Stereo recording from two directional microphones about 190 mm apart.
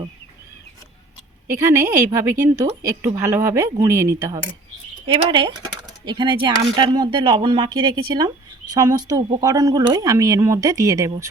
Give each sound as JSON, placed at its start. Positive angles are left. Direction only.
{"t": 1.5, "sound": "speech", "side_deg": -15}
{"t": 5.0, "sound": "speech", "side_deg": -25}